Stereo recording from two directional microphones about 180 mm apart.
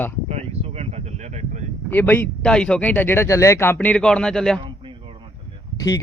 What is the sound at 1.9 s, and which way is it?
Speech, 10° left (ahead or behind).